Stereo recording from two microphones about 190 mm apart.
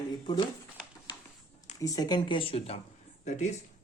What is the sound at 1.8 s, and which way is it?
Speech, 20° left (ahead or behind).